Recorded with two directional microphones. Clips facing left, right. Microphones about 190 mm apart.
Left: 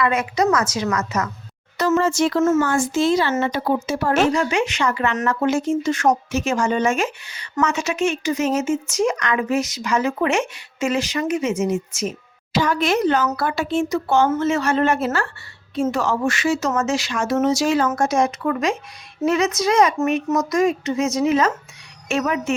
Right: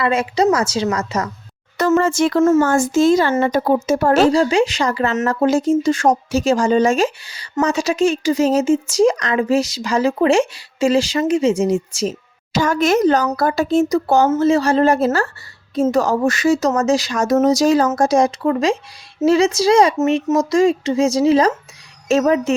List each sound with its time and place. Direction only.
0.0 s speech: 30° right (ahead or behind)
1.8 s speech: 50° right (ahead or behind); by 12.1 s 30° right (ahead or behind)
12.5 s speech: 45° right (ahead or behind)